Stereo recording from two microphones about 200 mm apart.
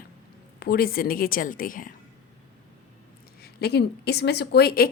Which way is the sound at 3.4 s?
50° left (ahead or behind).